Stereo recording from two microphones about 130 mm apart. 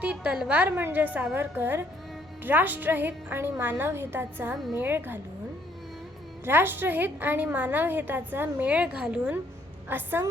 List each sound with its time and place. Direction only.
0.0 s a woman's voice: 10° right (ahead or behind)
6.4 s a woman's voice: 15° right (ahead or behind)